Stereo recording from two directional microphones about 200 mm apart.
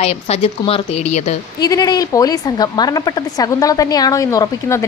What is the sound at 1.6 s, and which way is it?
A woman's voice, 20° left (ahead or behind).